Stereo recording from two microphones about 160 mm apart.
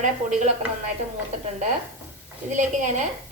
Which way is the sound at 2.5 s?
50° right (ahead or behind).